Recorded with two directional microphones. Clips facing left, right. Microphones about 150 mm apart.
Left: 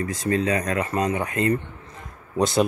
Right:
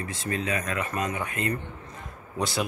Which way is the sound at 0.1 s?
40° left (ahead or behind).